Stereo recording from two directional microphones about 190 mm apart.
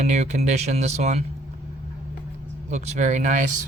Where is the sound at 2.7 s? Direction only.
35° right (ahead or behind).